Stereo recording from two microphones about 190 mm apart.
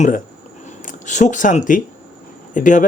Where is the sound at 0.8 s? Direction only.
40° left (ahead or behind).